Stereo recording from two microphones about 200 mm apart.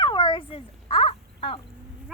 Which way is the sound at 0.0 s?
25° left (ahead or behind).